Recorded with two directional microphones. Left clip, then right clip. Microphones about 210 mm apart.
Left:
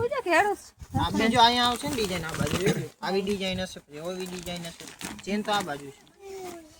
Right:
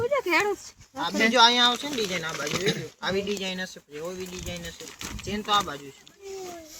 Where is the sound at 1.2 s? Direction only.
5° left (ahead or behind).